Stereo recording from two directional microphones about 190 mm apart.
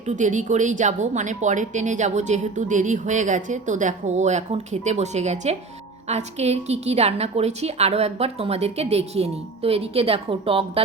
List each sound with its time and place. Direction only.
0.0 s a woman's voice: 40° right (ahead or behind)